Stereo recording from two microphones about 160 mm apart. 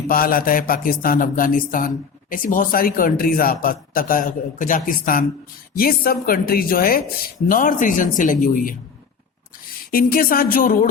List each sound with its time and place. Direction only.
0.1 s a man's voice: 65° left (ahead or behind)
9.9 s a man's voice: 65° left (ahead or behind)